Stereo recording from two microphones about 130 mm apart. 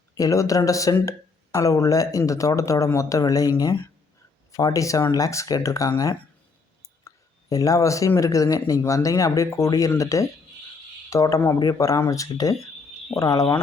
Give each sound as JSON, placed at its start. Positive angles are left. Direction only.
{"t": 0.2, "sound": "speech", "side_deg": 25}
{"t": 4.5, "sound": "speech", "side_deg": 25}
{"t": 7.5, "sound": "speech", "side_deg": 25}